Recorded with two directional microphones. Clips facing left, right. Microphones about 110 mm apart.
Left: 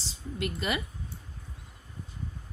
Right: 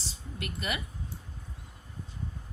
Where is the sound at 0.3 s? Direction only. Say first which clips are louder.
Left 4 dB; 30° left (ahead or behind).